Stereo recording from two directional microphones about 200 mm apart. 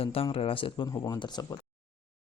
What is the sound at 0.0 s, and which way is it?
Speech, 30° left (ahead or behind).